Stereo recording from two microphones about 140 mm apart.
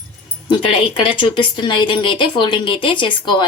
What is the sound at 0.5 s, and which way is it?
A woman's voice, 40° left (ahead or behind).